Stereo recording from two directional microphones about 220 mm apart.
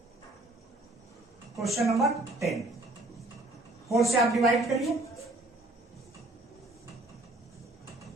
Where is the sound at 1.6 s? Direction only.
Centre (ahead or behind).